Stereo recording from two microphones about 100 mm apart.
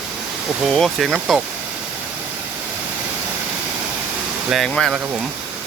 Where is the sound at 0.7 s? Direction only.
5° left (ahead or behind).